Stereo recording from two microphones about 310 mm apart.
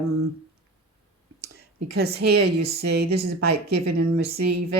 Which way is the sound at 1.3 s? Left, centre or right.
Right.